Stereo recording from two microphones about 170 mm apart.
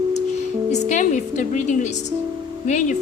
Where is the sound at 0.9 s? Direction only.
45° left (ahead or behind).